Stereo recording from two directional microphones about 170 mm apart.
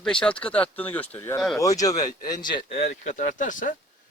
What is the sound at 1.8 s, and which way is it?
A man's voice, 20° left (ahead or behind).